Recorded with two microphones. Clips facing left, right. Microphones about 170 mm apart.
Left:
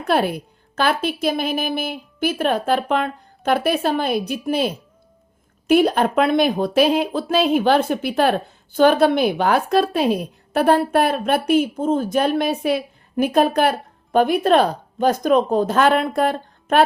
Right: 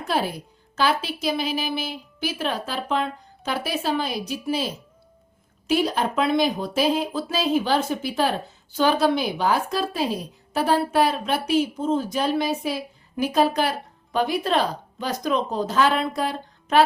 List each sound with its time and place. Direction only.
0.1 s speech: 60° left (ahead or behind)